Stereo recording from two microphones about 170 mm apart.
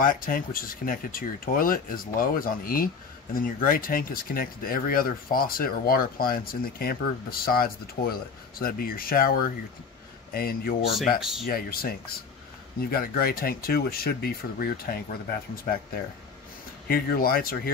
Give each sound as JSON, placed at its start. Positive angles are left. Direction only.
{"t": 0.0, "sound": "speech", "side_deg": 55}
{"t": 11.1, "sound": "speech", "side_deg": -5}
{"t": 11.4, "sound": "speech", "side_deg": 65}
{"t": 16.8, "sound": "speech", "side_deg": 60}